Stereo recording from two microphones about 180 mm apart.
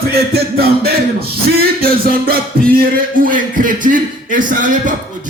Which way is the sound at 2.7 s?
50° right (ahead or behind).